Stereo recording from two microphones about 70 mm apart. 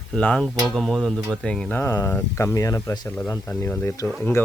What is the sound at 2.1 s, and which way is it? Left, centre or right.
Speech, left.